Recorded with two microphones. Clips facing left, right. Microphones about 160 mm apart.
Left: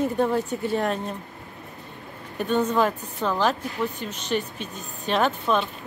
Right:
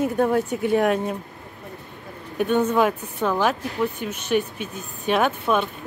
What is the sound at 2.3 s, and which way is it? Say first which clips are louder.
A woman's voice: right 3 dB; 10° right (ahead or behind).